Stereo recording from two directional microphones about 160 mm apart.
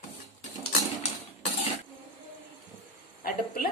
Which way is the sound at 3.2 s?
65° left (ahead or behind).